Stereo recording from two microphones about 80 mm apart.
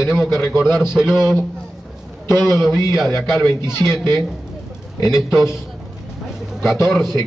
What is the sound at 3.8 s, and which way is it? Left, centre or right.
Speech, left.